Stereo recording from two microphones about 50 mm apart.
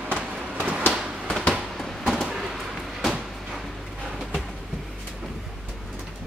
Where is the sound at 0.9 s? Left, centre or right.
Centre.